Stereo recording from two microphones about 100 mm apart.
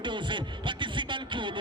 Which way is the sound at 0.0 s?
50° right (ahead or behind).